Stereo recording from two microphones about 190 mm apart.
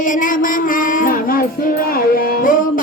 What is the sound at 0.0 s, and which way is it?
Music, 45° left (ahead or behind).